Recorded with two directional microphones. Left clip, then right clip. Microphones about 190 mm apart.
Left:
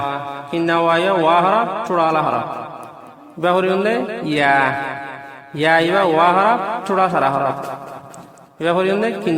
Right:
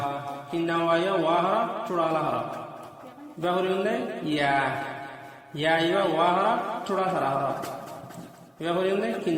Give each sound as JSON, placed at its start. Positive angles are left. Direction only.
{"t": 0.1, "sound": "mantra", "side_deg": 35}
{"t": 3.4, "sound": "mantra", "side_deg": 40}
{"t": 8.6, "sound": "mantra", "side_deg": 40}